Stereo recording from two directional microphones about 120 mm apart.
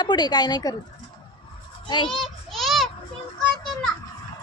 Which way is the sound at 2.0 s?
5° left (ahead or behind).